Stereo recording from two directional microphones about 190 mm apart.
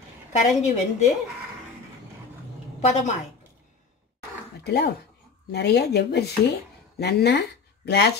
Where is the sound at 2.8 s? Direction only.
40° left (ahead or behind).